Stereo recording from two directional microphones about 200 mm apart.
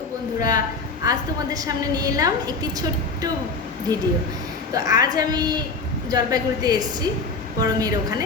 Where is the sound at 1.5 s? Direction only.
20° right (ahead or behind).